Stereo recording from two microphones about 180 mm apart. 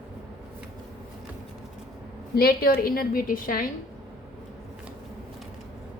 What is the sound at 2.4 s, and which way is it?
A woman's voice, 55° left (ahead or behind).